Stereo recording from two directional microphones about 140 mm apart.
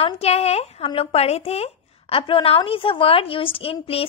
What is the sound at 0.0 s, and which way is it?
A woman's voice, 45° left (ahead or behind).